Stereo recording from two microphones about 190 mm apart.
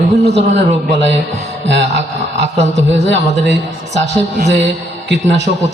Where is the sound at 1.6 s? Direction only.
70° right (ahead or behind).